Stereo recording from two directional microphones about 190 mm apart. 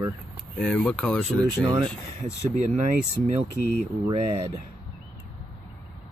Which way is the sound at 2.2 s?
40° right (ahead or behind).